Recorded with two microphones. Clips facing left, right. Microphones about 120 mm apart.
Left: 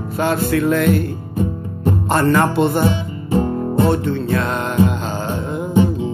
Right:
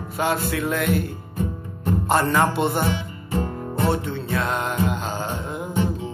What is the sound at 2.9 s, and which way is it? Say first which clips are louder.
Music: left 7 dB; 20° left (ahead or behind).